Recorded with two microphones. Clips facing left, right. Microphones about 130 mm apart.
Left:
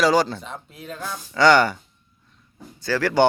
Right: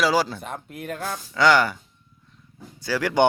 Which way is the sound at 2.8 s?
10° right (ahead or behind).